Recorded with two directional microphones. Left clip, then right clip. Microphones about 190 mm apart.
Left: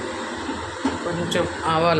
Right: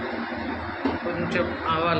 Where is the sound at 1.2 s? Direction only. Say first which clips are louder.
Left 3 dB; 40° left (ahead or behind).